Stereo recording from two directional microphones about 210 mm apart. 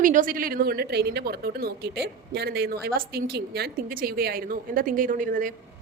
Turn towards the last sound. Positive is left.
turn(degrees=-40)  # may be behind; listen again after turning